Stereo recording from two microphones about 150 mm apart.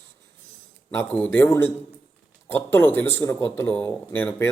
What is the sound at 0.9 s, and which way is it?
Speech, 15° left (ahead or behind).